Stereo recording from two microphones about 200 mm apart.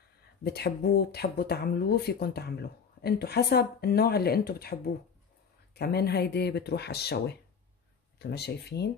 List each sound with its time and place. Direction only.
0.4 s speech: 55° left (ahead or behind)